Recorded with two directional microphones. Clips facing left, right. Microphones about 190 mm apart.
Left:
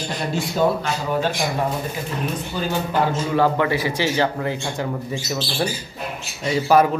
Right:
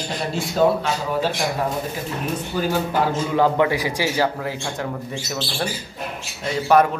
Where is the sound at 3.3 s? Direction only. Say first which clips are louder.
Right 1 dB; 15° right (ahead or behind).